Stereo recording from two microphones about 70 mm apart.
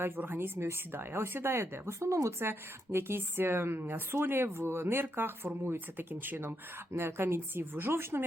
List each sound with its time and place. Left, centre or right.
0.0 s speech: right
2.5 s speech: right